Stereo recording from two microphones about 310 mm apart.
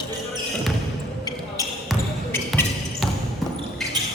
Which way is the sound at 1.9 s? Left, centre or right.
Centre.